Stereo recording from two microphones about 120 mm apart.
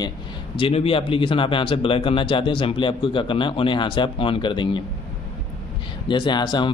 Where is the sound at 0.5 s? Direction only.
50° left (ahead or behind).